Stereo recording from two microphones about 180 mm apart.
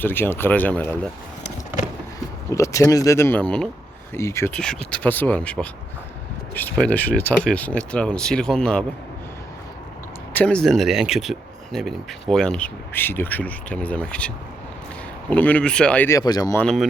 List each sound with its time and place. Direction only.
0.0 s speech: 10° left (ahead or behind)
2.5 s speech: 15° left (ahead or behind)
4.1 s speech: 15° left (ahead or behind)
10.3 s speech: 5° left (ahead or behind); by 16.6 s 20° left (ahead or behind)
16.6 s speech: 5° left (ahead or behind)